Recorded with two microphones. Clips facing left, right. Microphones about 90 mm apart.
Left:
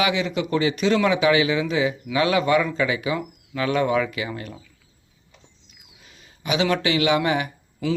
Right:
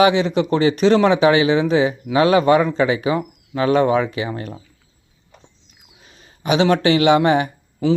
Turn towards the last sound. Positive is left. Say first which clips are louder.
# right 7 dB
turn(degrees=-35)  # may be behind; listen again after turning